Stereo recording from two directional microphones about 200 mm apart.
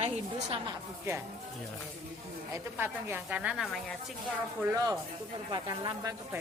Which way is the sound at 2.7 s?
10° right (ahead or behind).